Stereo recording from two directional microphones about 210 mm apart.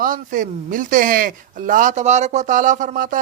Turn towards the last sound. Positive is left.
turn(degrees=-40)  # may be behind; listen again after turning